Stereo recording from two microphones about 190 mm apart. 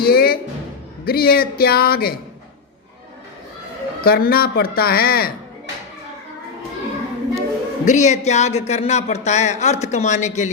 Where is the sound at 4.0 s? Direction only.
50° left (ahead or behind).